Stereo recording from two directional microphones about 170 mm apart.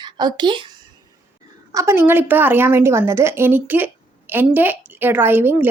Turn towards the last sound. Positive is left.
turn(degrees=-10)  # may be behind; listen again after turning